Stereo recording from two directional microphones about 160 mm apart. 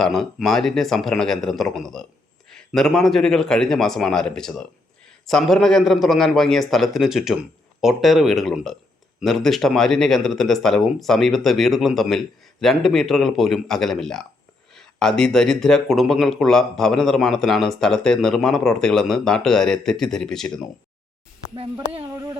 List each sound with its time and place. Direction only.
0.0 s speech: centre (ahead or behind)
21.5 s speech: 35° right (ahead or behind)
22.1 s a sound: 20° right (ahead or behind)